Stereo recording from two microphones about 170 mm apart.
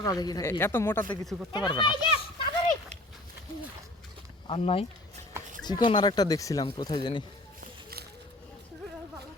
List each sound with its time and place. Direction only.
0.0 s speech: 20° left (ahead or behind)
1.0 s speech: 25° left (ahead or behind)
4.4 s speech: 35° left (ahead or behind)